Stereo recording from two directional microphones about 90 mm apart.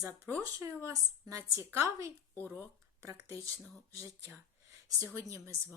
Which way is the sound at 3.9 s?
35° right (ahead or behind).